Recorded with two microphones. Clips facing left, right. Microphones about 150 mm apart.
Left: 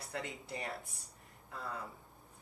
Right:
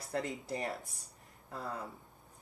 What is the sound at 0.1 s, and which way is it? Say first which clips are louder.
Speech: right 6 dB; 40° right (ahead or behind).